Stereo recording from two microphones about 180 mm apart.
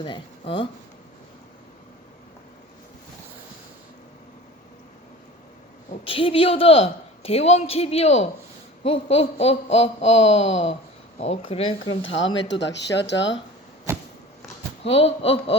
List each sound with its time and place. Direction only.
0.0 s speech: 30° left (ahead or behind)
5.9 s a woman's voice: 30° left (ahead or behind)
11.9 s speech: 90° left
14.8 s a woman's voice: 35° left (ahead or behind)